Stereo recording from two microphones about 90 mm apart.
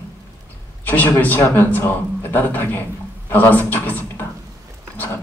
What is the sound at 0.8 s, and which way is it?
A man's voice, 20° left (ahead or behind).